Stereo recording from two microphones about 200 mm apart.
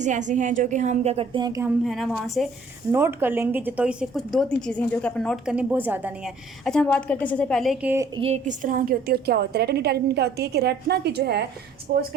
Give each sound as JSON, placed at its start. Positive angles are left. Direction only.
{"t": 0.0, "sound": "a woman's voice", "side_deg": -40}
{"t": 1.6, "sound": "speech", "side_deg": 0}
{"t": 2.9, "sound": "speech", "side_deg": -10}
{"t": 8.1, "sound": "a woman's voice", "side_deg": -30}